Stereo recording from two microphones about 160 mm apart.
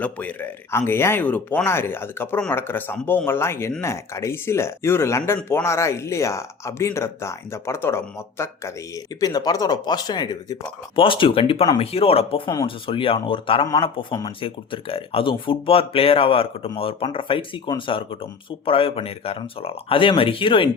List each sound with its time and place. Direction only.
0.0 s speech: 10° left (ahead or behind); by 20.7 s 30° left (ahead or behind)